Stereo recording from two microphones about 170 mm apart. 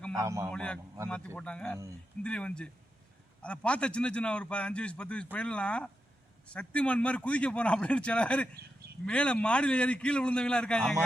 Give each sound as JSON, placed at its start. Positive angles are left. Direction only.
{"t": 0.2, "sound": "a man's voice", "side_deg": -15}
{"t": 0.5, "sound": "a man's voice", "side_deg": 5}